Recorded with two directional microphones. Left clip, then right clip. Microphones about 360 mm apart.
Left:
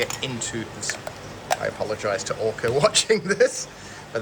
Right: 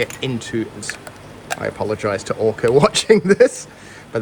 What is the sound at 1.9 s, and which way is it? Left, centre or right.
Speech, centre.